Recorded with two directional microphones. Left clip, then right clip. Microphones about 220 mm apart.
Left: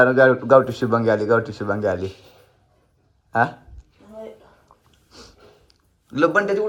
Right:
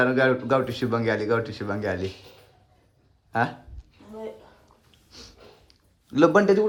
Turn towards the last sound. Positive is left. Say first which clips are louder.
# even
turn(degrees=-25)  # may be behind; listen again after turning